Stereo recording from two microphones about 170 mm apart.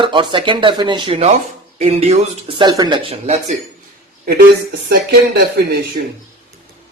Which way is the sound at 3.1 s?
40° right (ahead or behind).